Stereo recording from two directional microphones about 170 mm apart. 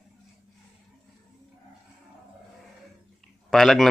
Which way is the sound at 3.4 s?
Centre (ahead or behind).